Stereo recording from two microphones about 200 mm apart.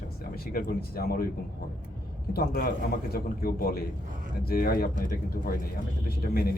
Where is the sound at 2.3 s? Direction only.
45° left (ahead or behind).